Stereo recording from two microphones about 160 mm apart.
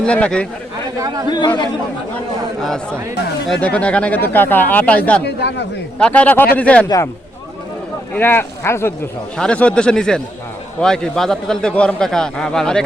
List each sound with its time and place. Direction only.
0.0 s speech: 5° left (ahead or behind)
0.9 s speech: 20° right (ahead or behind)
1.3 s speech: 25° left (ahead or behind)
2.1 s a man's voice: 5° left (ahead or behind)
5.2 s speech: 90° left
6.0 s speech: 10° left (ahead or behind)
6.8 s speech: 20° left (ahead or behind)
8.1 s a man's voice: 10° left (ahead or behind)